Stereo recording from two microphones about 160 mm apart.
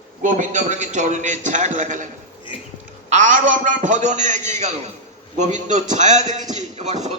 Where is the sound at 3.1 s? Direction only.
55° right (ahead or behind).